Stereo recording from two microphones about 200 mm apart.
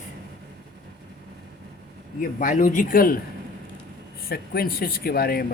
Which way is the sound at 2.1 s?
40° left (ahead or behind).